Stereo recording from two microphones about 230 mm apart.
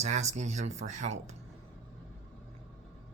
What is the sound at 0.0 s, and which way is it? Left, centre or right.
Speech, right.